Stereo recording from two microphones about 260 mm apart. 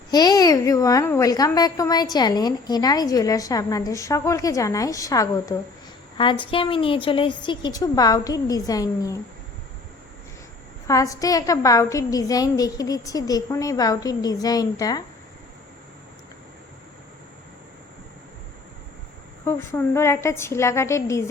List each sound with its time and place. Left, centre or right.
0.1 s a child's voice: centre
10.8 s a child's voice: centre
19.5 s a child's voice: centre